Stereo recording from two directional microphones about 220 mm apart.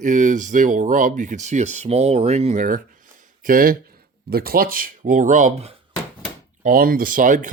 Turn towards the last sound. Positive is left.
turn(degrees=-35)  # may be behind; listen again after turning